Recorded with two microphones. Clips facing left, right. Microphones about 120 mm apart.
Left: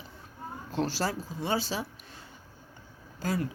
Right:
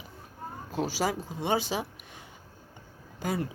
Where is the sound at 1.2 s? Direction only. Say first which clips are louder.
Right 2 dB; 20° right (ahead or behind).